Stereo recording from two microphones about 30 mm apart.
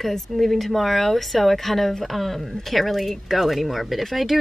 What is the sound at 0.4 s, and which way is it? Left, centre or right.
A woman's voice, centre.